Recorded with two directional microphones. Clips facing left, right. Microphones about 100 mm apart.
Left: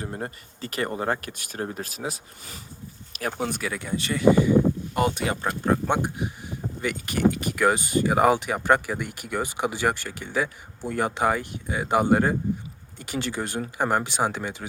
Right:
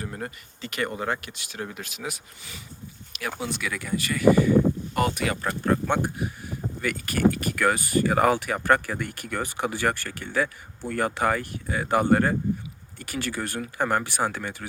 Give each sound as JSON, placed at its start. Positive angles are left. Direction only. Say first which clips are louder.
{"t": 0.0, "sound": "speech", "louder": "left 2 dB", "side_deg": 25}
{"t": 3.1, "sound": "a sound", "louder": "left 3 dB", "side_deg": 40}
{"t": 3.6, "sound": "speech", "louder": "even", "side_deg": 25}